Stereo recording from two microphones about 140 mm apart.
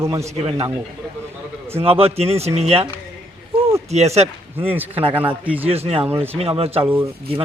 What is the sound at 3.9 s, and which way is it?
Speech, 50° right (ahead or behind).